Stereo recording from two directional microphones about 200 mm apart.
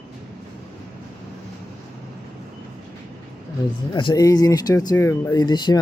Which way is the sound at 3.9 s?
20° left (ahead or behind).